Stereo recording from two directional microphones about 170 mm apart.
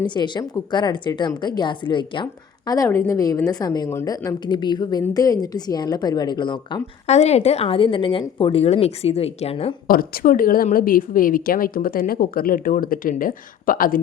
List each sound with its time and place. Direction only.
0.1 s a woman's voice: 25° left (ahead or behind)
7.1 s a woman's voice: 40° left (ahead or behind)
9.8 s a woman's voice: 60° left (ahead or behind)